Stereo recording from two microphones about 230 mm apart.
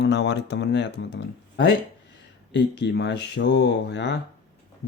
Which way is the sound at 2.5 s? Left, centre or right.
Left.